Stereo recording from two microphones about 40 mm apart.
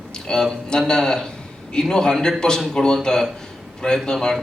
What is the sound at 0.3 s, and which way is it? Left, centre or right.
A man's voice, left.